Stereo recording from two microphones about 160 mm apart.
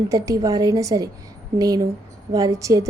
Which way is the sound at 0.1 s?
20° right (ahead or behind).